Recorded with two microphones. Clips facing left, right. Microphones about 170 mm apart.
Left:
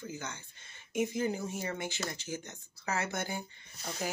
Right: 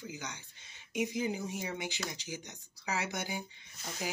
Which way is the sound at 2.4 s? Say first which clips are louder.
Left 2 dB; 50° left (ahead or behind).